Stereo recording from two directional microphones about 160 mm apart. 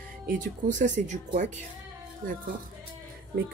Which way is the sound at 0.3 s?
55° right (ahead or behind).